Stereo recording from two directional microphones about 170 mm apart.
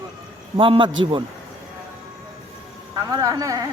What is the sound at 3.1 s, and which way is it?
Speech, 20° right (ahead or behind).